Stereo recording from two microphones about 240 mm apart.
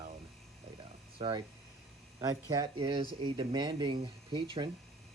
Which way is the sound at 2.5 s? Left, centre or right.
Centre.